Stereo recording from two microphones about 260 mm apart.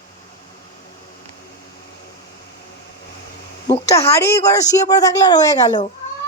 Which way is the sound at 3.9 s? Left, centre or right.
Centre.